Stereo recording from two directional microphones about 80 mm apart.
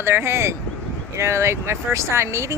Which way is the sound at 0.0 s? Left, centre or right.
Right.